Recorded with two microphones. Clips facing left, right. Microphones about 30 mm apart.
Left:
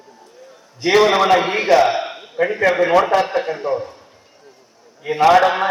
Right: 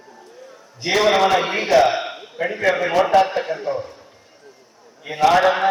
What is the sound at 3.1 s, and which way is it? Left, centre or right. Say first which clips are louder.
Speech: right 1 dB; centre.